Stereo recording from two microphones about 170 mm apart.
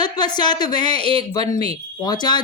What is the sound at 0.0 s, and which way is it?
Speech, 25° left (ahead or behind).